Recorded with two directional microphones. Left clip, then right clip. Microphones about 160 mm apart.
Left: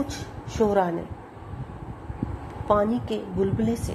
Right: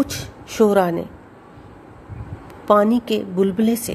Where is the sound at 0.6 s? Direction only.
45° right (ahead or behind).